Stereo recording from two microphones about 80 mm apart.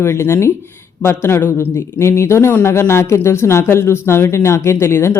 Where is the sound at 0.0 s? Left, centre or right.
Left.